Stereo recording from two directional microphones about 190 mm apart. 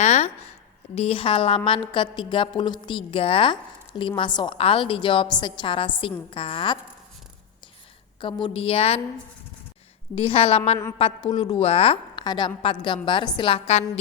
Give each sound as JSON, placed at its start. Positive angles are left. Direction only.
{"t": 0.0, "sound": "a sound", "side_deg": 35}
{"t": 0.9, "sound": "a woman's voice", "side_deg": 30}
{"t": 8.2, "sound": "a woman's voice", "side_deg": 25}
{"t": 10.2, "sound": "a woman's voice", "side_deg": 30}